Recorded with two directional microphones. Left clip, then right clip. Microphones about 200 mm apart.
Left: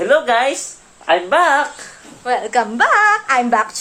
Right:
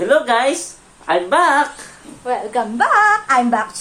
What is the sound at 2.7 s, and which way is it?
Speech, 15° left (ahead or behind).